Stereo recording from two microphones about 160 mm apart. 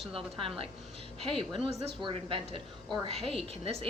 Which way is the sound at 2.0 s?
35° right (ahead or behind).